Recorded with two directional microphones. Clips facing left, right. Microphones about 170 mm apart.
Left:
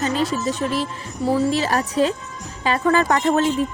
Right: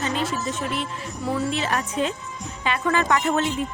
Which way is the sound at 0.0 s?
35° left (ahead or behind).